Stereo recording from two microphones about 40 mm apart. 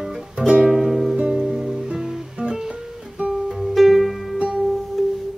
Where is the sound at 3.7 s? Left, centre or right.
Centre.